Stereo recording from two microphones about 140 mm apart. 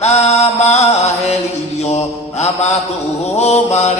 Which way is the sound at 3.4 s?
50° left (ahead or behind).